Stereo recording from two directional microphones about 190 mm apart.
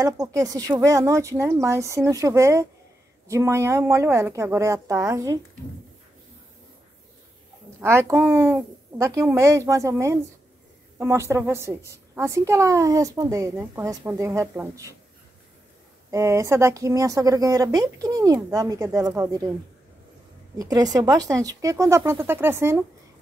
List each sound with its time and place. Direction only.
0.0 s a woman's voice: 15° right (ahead or behind)
7.8 s a woman's voice: 15° right (ahead or behind)
16.1 s a woman's voice: 15° right (ahead or behind)
20.5 s a woman's voice: 20° right (ahead or behind)